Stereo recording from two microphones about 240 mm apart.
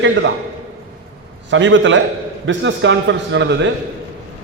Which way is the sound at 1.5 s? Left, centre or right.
Right.